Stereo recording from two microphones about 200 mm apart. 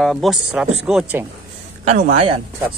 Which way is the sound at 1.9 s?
35° right (ahead or behind).